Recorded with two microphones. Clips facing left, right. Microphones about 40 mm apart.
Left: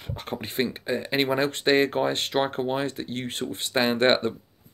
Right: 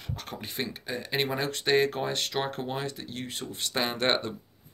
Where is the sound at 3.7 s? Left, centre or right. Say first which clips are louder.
Left 6 dB; left.